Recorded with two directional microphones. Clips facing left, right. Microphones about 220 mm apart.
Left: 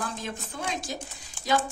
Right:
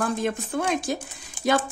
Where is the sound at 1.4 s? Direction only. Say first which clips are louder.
Right 11 dB; 15° right (ahead or behind).